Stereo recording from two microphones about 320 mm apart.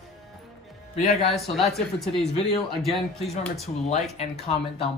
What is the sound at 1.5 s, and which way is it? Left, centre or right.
Speech, centre.